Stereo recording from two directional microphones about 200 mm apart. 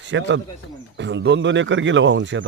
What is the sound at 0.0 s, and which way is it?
Speech, 65° right (ahead or behind).